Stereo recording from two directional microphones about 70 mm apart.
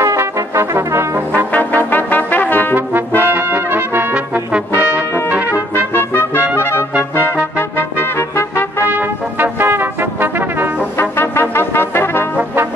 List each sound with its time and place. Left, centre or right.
0.0 s brass instrument: right
1.3 s brass instrument: left
3.2 s brass instrument: right
5.3 s trumpet: right
7.0 s trumpet: right
7.5 s trumpet: left
8.8 s brass instrument: right
11.0 s brass instrument: left